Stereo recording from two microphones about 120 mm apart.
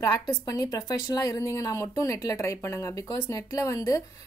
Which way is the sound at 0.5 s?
30° left (ahead or behind).